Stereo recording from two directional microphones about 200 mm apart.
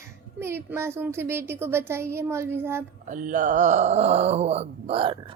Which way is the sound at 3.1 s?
40° right (ahead or behind).